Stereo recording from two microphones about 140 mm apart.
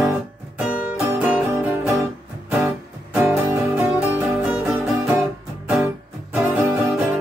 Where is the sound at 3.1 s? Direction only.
15° right (ahead or behind).